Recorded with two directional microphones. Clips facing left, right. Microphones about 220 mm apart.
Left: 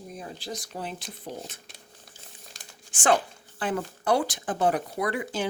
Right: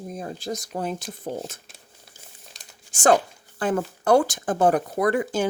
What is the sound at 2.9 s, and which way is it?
Speech, 40° right (ahead or behind).